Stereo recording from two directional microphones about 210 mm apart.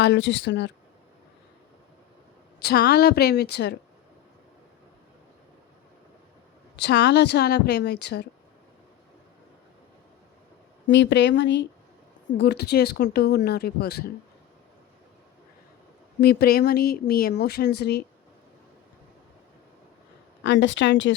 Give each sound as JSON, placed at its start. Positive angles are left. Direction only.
{"t": 0.0, "sound": "speech", "side_deg": 55}
{"t": 2.6, "sound": "speech", "side_deg": 50}
{"t": 6.7, "sound": "speech", "side_deg": 50}
{"t": 10.8, "sound": "speech", "side_deg": 60}
{"t": 16.2, "sound": "speech", "side_deg": 50}
{"t": 20.4, "sound": "speech", "side_deg": 60}